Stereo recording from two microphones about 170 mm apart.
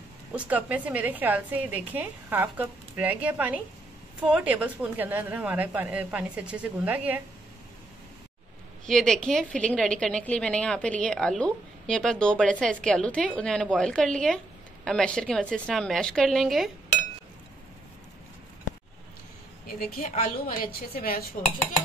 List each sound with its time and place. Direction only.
0.3 s a woman's voice: 10° right (ahead or behind)
8.8 s a woman's voice: 5° left (ahead or behind)
19.9 s a woman's voice: 55° left (ahead or behind)